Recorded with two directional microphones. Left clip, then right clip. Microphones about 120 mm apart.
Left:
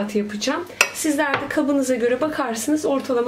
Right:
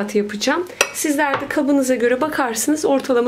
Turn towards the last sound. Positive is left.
turn(degrees=-40)  # may be behind; listen again after turning